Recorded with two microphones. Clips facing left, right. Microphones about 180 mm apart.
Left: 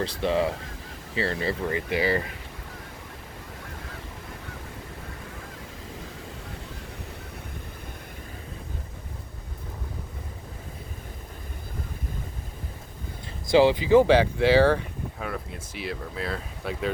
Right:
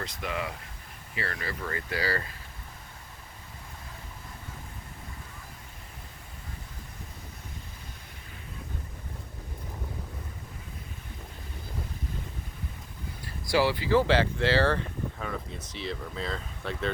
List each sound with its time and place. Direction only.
0.0 s speech: 30° left (ahead or behind)
13.5 s speech: 20° left (ahead or behind)